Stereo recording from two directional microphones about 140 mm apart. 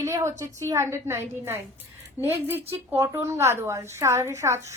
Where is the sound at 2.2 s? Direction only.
15° right (ahead or behind).